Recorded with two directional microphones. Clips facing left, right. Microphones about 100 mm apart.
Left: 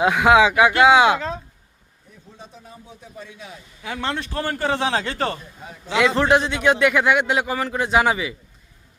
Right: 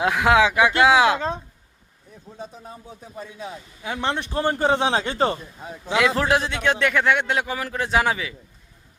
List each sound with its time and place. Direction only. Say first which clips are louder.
0.0 s a man's voice: left 3 dB; centre (ahead or behind)
2.4 s speech: right 5 dB; 40° right (ahead or behind)
3.8 s a man's voice: right 1 dB; 20° right (ahead or behind)
5.9 s a man's voice: left 2 dB; 5° right (ahead or behind)